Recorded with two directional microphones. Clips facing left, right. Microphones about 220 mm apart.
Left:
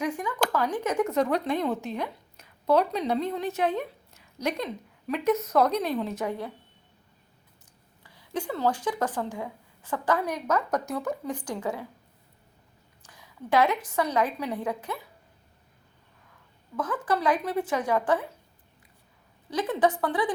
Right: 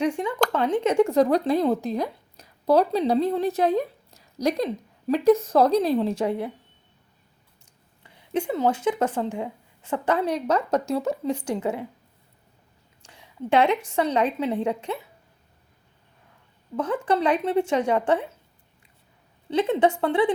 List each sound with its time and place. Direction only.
0.0 s speech: 30° right (ahead or behind)
8.0 s speech: 20° right (ahead or behind)
13.0 s a woman's voice: 30° right (ahead or behind)
16.7 s speech: 25° right (ahead or behind)
19.5 s speech: 25° right (ahead or behind)